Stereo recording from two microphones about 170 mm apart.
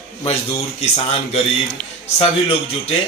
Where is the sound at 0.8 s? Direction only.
35° left (ahead or behind).